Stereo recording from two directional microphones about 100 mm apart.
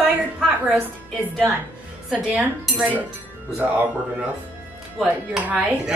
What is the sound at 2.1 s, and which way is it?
Speech, 15° right (ahead or behind).